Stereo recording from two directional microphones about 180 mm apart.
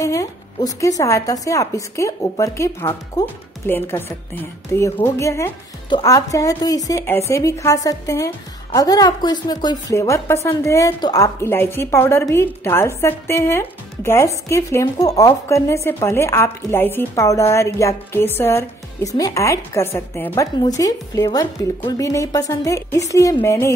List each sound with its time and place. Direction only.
0.0 s a woman's voice: 20° left (ahead or behind)